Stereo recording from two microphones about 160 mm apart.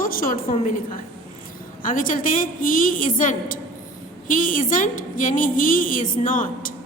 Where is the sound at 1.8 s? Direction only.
60° left (ahead or behind).